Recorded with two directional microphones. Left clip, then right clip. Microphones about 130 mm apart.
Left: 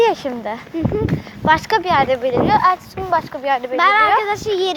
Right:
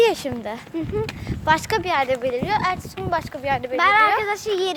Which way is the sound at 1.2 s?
20° right (ahead or behind).